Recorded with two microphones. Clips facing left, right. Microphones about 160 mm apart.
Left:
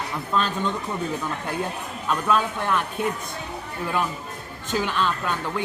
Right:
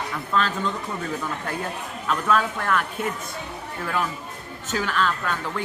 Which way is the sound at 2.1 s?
15° left (ahead or behind).